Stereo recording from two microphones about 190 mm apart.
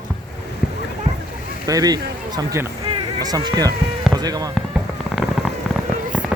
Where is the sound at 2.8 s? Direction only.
25° right (ahead or behind).